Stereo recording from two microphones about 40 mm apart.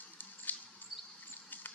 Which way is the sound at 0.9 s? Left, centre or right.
Centre.